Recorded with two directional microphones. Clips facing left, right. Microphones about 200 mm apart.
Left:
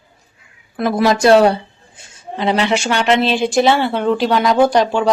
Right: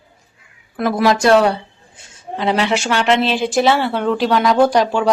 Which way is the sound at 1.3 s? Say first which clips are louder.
Left 3 dB; 35° left (ahead or behind).